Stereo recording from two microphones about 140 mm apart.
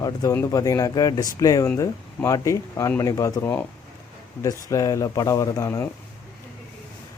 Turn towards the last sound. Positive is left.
turn(degrees=20)  # may be behind; listen again after turning